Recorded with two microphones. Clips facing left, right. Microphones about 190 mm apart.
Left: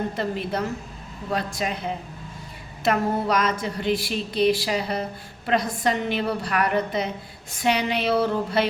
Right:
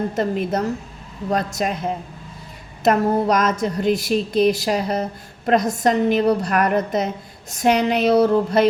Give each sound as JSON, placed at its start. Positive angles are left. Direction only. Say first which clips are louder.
{"t": 0.2, "sound": "a woman's voice", "louder": "right 5 dB", "side_deg": -45}